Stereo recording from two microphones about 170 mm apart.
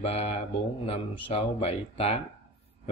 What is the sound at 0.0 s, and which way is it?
Speech, 35° left (ahead or behind).